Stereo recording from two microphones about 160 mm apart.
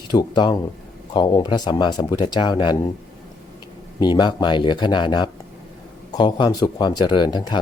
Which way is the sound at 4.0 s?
25° left (ahead or behind).